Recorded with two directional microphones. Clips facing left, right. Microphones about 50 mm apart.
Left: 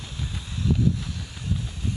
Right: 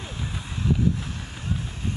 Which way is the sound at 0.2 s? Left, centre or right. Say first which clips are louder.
Even; centre.